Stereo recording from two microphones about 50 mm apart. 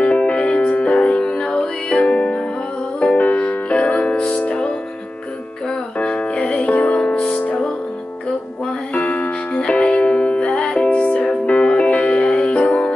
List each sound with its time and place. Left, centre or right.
0.0 s music: left
3.2 s music: left
5.9 s music: left
8.9 s music: left